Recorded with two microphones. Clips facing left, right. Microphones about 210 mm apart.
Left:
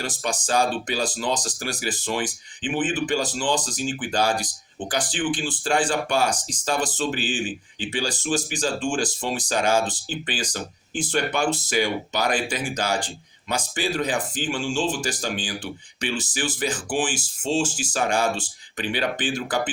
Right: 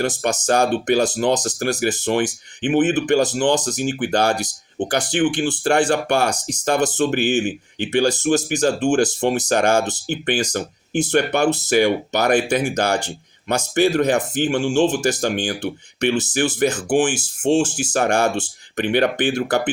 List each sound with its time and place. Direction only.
0.0 s speech: 65° right (ahead or behind)